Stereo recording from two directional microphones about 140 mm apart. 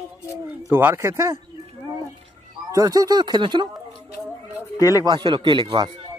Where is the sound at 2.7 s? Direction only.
25° right (ahead or behind).